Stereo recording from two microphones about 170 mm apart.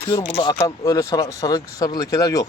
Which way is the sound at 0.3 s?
35° left (ahead or behind).